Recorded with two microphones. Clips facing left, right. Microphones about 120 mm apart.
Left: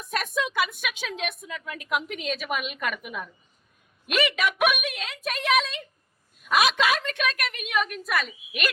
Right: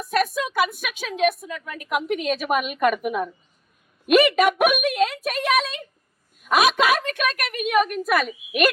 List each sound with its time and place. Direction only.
0.0 s a woman's voice: 45° right (ahead or behind)